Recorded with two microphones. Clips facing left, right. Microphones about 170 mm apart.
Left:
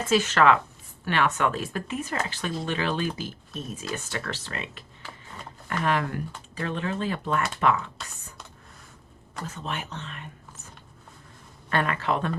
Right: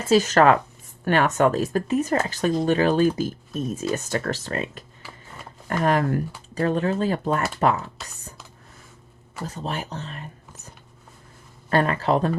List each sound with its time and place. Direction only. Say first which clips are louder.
0.1 s speech: right 4 dB; 40° right (ahead or behind)
9.5 s speech: right 4 dB; 35° right (ahead or behind)
11.7 s speech: right 5 dB; 35° right (ahead or behind)